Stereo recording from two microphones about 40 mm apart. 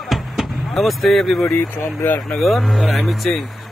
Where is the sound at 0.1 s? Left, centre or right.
Centre.